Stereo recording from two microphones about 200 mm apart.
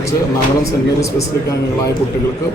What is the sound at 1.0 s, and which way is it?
Speech, 15° left (ahead or behind).